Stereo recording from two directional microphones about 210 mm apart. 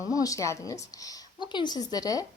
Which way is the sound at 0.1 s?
15° left (ahead or behind).